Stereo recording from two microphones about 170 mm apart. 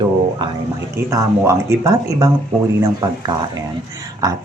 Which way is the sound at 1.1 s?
20° right (ahead or behind).